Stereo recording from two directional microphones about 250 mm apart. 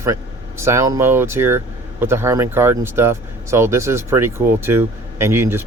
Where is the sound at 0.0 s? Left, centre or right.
Centre.